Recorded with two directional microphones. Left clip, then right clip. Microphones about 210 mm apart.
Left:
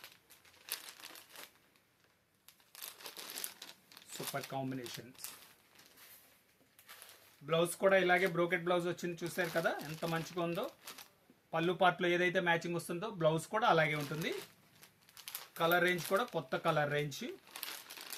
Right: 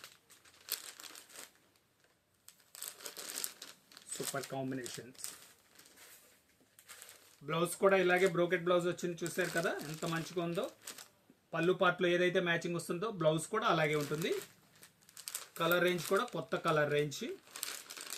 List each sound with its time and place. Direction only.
2.7 s crumpling: 5° right (ahead or behind)
4.5 s speech: 30° left (ahead or behind)
7.4 s speech: 15° left (ahead or behind)
15.5 s speech: 15° left (ahead or behind)